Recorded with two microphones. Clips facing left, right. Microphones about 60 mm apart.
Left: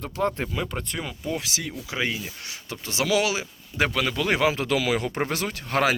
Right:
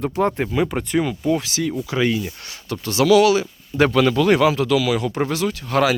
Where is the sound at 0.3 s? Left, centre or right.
Centre.